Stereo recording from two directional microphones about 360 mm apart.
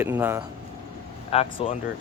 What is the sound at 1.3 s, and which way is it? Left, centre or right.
Speech, centre.